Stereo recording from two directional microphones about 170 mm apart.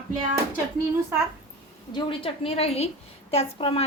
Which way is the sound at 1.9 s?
35° left (ahead or behind).